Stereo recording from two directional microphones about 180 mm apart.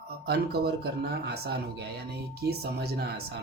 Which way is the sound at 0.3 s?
65° right (ahead or behind).